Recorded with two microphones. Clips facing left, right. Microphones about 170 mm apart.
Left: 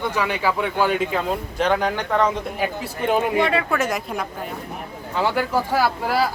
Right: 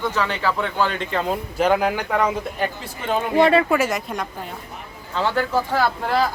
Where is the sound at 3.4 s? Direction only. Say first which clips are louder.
Right 5 dB; 35° right (ahead or behind).